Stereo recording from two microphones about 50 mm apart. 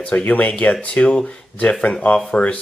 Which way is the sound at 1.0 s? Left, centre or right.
Centre.